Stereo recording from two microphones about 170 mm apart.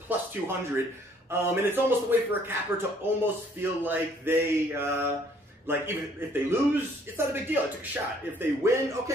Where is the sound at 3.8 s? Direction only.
10° right (ahead or behind).